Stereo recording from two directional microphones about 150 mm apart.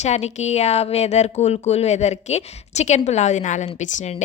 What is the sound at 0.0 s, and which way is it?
Speech, 50° left (ahead or behind).